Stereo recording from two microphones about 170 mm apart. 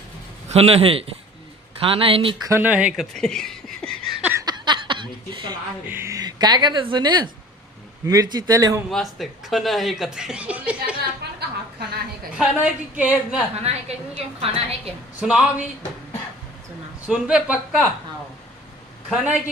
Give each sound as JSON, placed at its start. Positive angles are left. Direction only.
{"t": 0.4, "sound": "a woman's voice", "side_deg": -35}
{"t": 2.5, "sound": "a woman's voice", "side_deg": -10}
{"t": 2.9, "sound": "a sound", "side_deg": 0}
{"t": 4.3, "sound": "a sound", "side_deg": -20}
{"t": 5.9, "sound": "speech", "side_deg": -15}
{"t": 8.9, "sound": "speech", "side_deg": 0}
{"t": 11.2, "sound": "a sound", "side_deg": -70}
{"t": 12.4, "sound": "a woman's voice", "side_deg": -5}
{"t": 13.6, "sound": "a woman's voice", "side_deg": -35}
{"t": 15.1, "sound": "a woman's voice", "side_deg": -5}
{"t": 17.1, "sound": "speech", "side_deg": -5}
{"t": 19.1, "sound": "a woman's voice", "side_deg": -5}